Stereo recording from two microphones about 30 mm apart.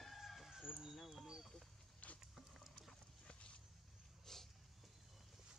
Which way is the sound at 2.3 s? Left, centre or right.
Centre.